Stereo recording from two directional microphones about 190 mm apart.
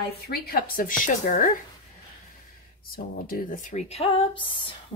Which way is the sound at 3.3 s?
45° left (ahead or behind).